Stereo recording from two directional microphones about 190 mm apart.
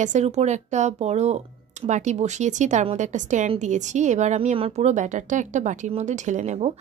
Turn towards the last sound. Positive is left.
turn(degrees=-35)  # may be behind; listen again after turning